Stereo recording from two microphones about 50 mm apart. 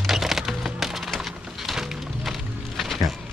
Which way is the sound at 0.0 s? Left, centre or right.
Centre.